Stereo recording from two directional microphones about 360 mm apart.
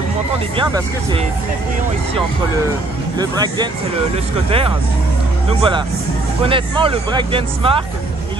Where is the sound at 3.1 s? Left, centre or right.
Centre.